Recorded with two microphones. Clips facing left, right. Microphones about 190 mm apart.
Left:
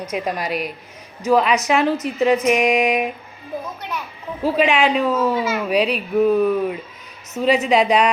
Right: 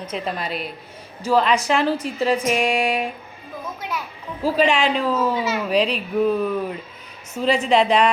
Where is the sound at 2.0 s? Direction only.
35° right (ahead or behind).